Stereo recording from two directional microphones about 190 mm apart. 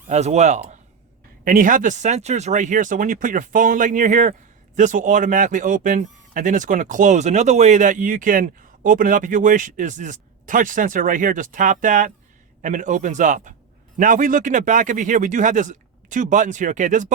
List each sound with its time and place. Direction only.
0.1 s a man's voice: 35° right (ahead or behind)